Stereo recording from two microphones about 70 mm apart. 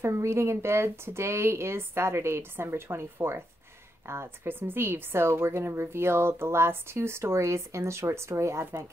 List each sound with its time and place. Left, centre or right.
0.0 s speech: right